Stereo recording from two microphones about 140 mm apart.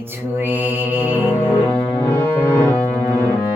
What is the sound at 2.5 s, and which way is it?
Music, 15° left (ahead or behind).